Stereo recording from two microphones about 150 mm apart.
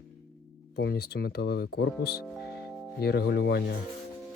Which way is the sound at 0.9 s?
90° left.